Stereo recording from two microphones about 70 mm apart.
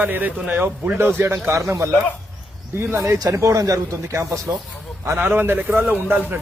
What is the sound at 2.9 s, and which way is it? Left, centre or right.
Speech, right.